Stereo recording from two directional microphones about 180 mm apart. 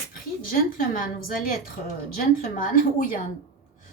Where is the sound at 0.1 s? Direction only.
50° left (ahead or behind).